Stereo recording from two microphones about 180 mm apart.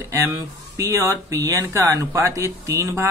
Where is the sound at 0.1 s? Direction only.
15° right (ahead or behind).